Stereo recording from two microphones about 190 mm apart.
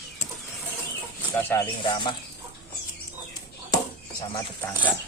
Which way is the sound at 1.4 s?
10° left (ahead or behind).